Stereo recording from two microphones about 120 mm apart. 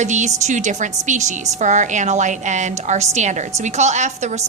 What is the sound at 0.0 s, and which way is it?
A woman's voice, 80° right.